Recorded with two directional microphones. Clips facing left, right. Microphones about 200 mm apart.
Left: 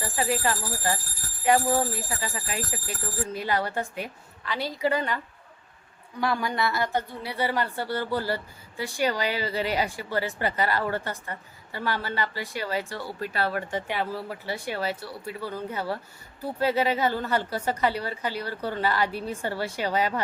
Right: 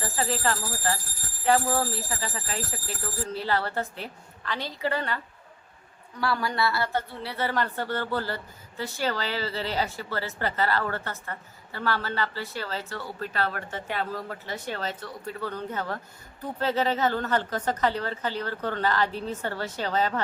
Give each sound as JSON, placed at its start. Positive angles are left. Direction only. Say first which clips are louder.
{"t": 0.0, "sound": "a woman's voice", "louder": "left 1 dB", "side_deg": 15}